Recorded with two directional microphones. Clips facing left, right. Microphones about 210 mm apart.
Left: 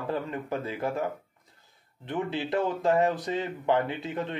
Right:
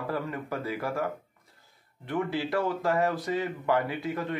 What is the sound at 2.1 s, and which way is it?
Speech, 20° left (ahead or behind).